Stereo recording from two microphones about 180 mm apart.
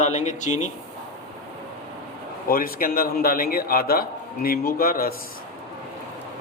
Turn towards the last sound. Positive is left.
turn(degrees=55)  # may be behind; listen again after turning